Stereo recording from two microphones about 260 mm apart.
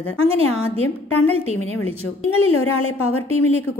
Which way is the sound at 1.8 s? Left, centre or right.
Left.